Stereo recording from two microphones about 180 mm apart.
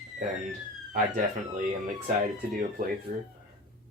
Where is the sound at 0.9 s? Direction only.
45° right (ahead or behind).